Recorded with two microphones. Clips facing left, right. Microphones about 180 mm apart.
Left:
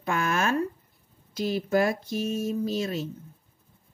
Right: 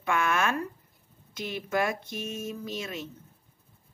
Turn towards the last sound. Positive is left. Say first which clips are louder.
# left 8 dB
turn(degrees=35)  # may be behind; listen again after turning